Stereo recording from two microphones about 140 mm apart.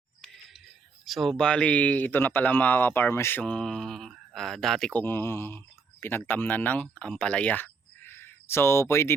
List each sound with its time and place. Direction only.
1.0 s speech: centre (ahead or behind); by 9.1 s 20° left (ahead or behind)